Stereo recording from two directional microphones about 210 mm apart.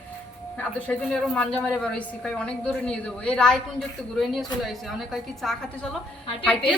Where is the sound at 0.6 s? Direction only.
5° left (ahead or behind).